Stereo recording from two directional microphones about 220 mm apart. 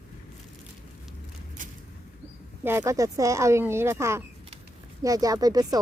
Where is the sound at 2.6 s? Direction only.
10° right (ahead or behind).